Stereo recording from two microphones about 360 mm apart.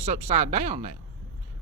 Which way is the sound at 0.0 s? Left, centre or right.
Centre.